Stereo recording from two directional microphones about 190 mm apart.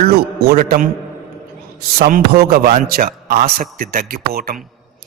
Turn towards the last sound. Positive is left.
turn(degrees=-55)  # may be behind; listen again after turning